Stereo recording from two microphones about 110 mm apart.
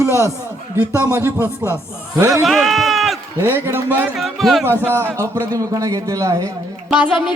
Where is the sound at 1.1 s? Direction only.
25° right (ahead or behind).